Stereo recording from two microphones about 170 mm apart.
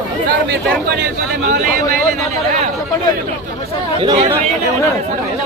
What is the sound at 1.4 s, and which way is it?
Speech, 60° right (ahead or behind).